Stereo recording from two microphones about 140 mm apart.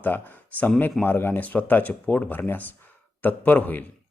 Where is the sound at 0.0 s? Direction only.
10° left (ahead or behind).